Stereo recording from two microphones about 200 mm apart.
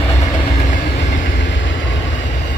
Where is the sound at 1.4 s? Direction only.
65° left (ahead or behind).